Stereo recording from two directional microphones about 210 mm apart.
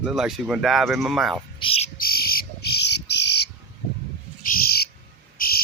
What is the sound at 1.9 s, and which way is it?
Bird, 45° left (ahead or behind).